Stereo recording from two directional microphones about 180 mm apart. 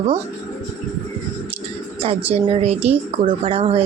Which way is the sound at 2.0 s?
35° right (ahead or behind).